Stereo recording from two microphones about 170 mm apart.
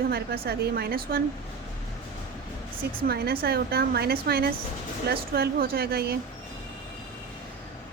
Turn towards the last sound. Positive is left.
turn(degrees=-65)  # may be behind; listen again after turning